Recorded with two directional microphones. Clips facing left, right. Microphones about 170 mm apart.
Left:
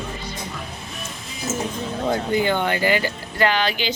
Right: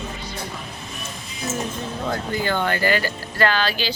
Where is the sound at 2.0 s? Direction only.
20° left (ahead or behind).